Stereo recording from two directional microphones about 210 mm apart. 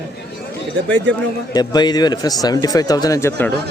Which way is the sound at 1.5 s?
20° left (ahead or behind).